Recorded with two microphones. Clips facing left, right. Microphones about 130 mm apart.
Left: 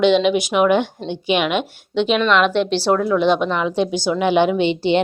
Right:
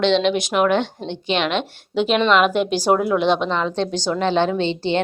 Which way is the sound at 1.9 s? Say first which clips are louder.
Even; centre (ahead or behind).